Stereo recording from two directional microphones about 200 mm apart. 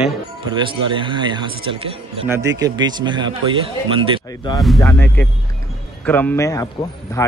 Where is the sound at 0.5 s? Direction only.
25° right (ahead or behind).